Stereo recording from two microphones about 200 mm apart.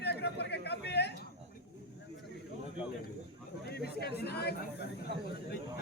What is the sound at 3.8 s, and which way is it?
Chatter, 55° left (ahead or behind).